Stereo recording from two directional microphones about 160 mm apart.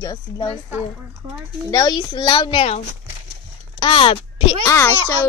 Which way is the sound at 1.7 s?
25° left (ahead or behind).